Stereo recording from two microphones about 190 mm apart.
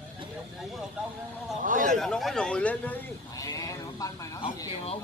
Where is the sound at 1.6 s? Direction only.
45° right (ahead or behind).